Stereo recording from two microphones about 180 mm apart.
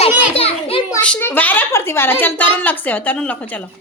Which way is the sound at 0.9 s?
10° left (ahead or behind).